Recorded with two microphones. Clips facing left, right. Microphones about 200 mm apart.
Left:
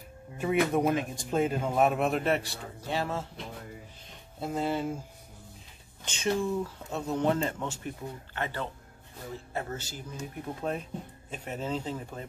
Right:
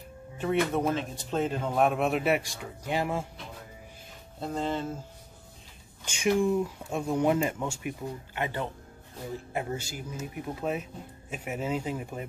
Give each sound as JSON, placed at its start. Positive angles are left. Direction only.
{"t": 0.4, "sound": "speech", "side_deg": 10}
{"t": 4.4, "sound": "speech", "side_deg": 5}
{"t": 6.0, "sound": "speech", "side_deg": -10}